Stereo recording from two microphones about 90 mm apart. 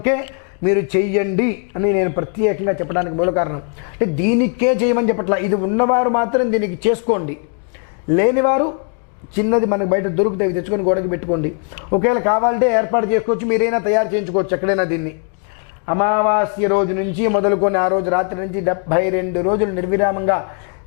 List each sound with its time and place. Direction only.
0.0 s a man's voice: 15° left (ahead or behind)